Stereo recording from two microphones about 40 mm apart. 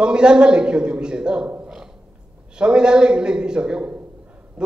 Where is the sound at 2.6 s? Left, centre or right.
Right.